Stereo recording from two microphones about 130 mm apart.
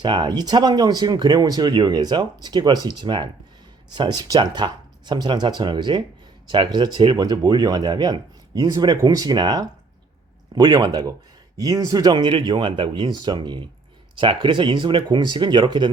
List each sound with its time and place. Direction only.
0.0 s speech: 35° right (ahead or behind)